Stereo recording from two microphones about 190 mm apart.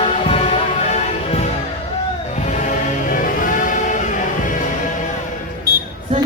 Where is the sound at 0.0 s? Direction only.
30° left (ahead or behind).